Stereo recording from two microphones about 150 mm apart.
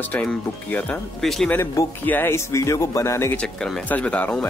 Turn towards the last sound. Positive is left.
turn(degrees=10)  # may be behind; listen again after turning